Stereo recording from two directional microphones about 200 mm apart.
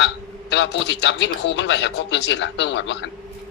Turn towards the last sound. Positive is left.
turn(degrees=65)  # may be behind; listen again after turning